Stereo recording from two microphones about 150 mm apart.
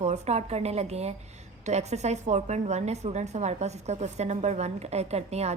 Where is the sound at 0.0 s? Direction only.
50° right (ahead or behind).